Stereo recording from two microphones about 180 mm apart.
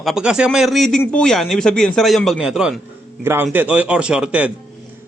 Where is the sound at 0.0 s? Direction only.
5° right (ahead or behind).